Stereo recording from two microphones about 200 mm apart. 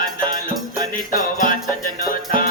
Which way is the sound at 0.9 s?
40° left (ahead or behind).